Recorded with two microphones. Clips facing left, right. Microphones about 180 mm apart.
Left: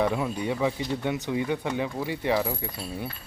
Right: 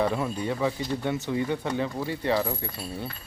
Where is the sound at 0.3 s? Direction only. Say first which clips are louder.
Left 1 dB; 15° left (ahead or behind).